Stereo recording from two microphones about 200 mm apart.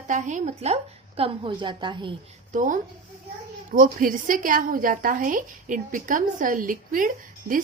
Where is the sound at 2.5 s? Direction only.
40° right (ahead or behind).